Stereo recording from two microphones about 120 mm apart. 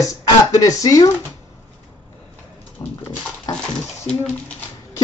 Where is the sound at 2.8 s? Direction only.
25° left (ahead or behind).